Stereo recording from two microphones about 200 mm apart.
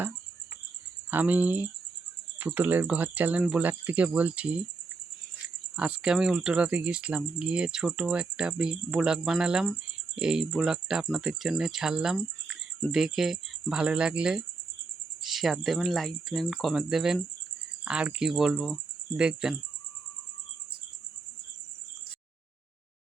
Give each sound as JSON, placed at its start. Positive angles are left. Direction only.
{"t": 1.1, "sound": "speech", "side_deg": -10}
{"t": 5.7, "sound": "speech", "side_deg": -5}